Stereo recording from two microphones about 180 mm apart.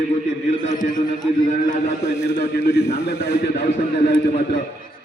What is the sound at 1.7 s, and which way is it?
A man's voice, 65° left (ahead or behind).